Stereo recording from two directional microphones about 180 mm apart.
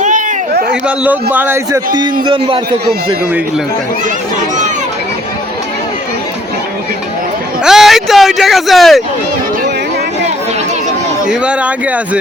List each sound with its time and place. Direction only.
0.9 s a man's voice: 10° right (ahead or behind)
2.2 s a man's voice: 25° right (ahead or behind)
7.6 s speech: centre (ahead or behind)
11.3 s a man's voice: 5° right (ahead or behind)